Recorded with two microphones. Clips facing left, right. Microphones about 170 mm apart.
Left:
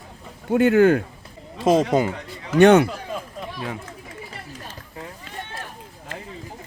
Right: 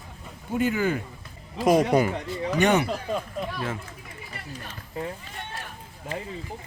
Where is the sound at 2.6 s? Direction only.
90° left.